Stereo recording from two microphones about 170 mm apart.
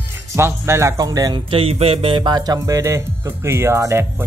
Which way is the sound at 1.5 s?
35° right (ahead or behind).